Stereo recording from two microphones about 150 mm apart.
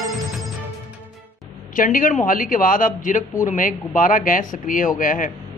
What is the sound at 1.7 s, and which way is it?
Speech, 65° left (ahead or behind).